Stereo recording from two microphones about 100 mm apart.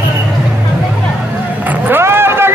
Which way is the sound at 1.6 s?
20° right (ahead or behind).